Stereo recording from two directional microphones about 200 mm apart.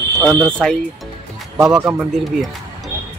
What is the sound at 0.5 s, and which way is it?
Speech, 5° left (ahead or behind).